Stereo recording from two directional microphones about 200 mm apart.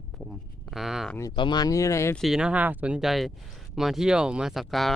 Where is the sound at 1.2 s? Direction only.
20° left (ahead or behind).